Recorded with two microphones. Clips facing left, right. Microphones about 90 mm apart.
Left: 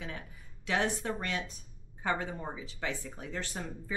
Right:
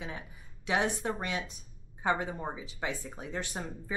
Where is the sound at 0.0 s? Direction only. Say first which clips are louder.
Right 1 dB; 15° right (ahead or behind).